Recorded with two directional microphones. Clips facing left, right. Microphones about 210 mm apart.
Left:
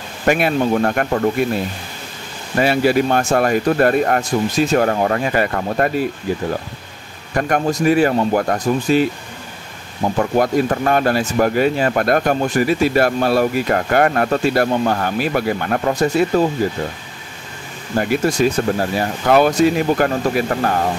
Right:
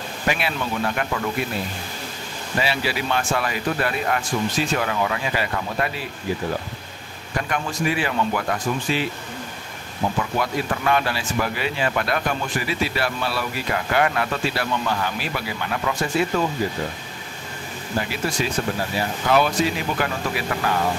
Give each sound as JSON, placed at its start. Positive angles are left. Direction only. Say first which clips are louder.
{"t": 0.2, "sound": "speech", "louder": "left 9 dB", "side_deg": 50}
{"t": 2.6, "sound": "speech", "louder": "left 11 dB", "side_deg": 50}
{"t": 7.3, "sound": "speech", "louder": "left 8 dB", "side_deg": 50}
{"t": 10.1, "sound": "speech", "louder": "left 11 dB", "side_deg": 45}
{"t": 17.9, "sound": "speech", "louder": "left 8 dB", "side_deg": 50}